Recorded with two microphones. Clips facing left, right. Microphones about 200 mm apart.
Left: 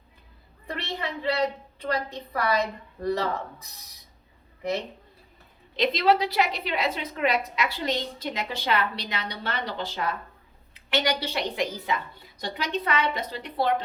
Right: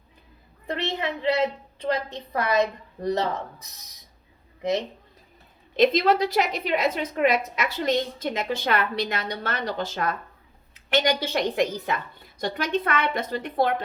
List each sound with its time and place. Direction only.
0.7 s a woman's voice: 20° right (ahead or behind)
2.4 s a woman's voice: 20° right (ahead or behind)
5.7 s a woman's voice: 45° right (ahead or behind)